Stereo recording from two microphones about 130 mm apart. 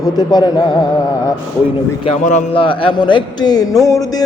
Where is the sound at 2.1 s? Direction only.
65° left (ahead or behind).